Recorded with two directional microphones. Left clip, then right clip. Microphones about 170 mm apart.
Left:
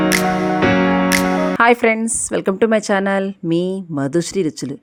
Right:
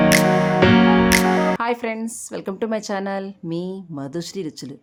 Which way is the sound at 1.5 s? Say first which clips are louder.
Left 10 dB; 40° left (ahead or behind).